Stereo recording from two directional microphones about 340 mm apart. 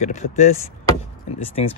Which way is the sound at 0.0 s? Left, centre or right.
Centre.